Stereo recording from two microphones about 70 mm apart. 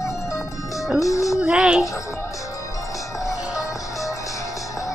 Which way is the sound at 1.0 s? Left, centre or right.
Left.